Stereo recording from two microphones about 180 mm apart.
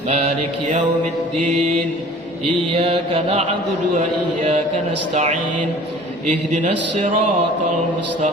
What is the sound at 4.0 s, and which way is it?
A man's voice, 40° right (ahead or behind).